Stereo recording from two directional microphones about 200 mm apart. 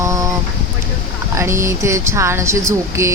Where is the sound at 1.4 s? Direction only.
15° right (ahead or behind).